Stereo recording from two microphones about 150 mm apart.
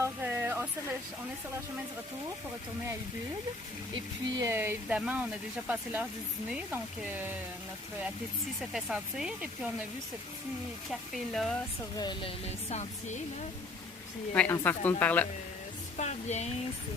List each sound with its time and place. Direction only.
0.0 s a sound: 15° right (ahead or behind)
3.9 s speech: 20° right (ahead or behind)
8.7 s speech: 5° right (ahead or behind)
11.1 s speech: centre (ahead or behind)
11.9 s a woman's voice: 30° left (ahead or behind)
12.7 s music: 50° left (ahead or behind)
14.3 s speech: 15° left (ahead or behind)
16.0 s music: 50° left (ahead or behind)